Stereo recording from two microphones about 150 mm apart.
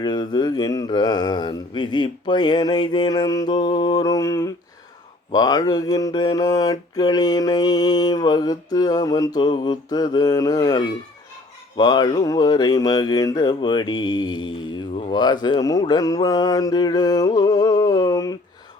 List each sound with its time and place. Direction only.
0.0 s mantra: 30° left (ahead or behind)